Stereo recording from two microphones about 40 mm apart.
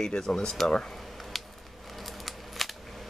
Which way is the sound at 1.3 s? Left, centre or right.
Centre.